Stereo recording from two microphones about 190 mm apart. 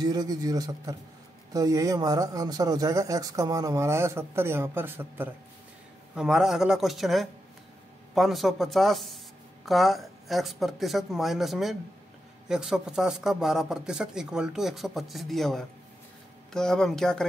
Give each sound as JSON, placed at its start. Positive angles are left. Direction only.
{"t": 0.0, "sound": "speech", "side_deg": -20}